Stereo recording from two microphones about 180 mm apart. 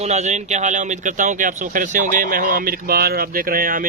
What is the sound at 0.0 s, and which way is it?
Speech, 40° right (ahead or behind).